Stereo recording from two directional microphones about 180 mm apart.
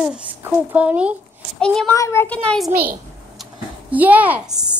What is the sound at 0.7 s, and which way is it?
Speech, 5° right (ahead or behind).